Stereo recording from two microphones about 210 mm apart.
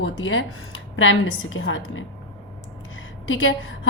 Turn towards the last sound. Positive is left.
turn(degrees=70)  # may be behind; listen again after turning